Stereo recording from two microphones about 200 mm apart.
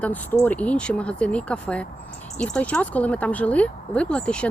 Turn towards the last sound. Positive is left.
turn(degrees=5)  # may be behind; listen again after turning